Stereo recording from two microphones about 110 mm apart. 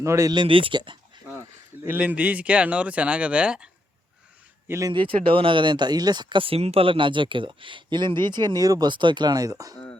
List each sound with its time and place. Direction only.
0.0 s speech: 25° right (ahead or behind)
0.3 s speech: 55° right (ahead or behind)
1.9 s speech: 15° right (ahead or behind)
4.9 s speech: 50° right (ahead or behind); by 9.7 s 35° right (ahead or behind)